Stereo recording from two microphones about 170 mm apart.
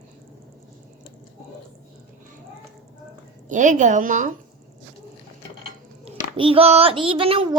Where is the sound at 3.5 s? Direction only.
45° right (ahead or behind).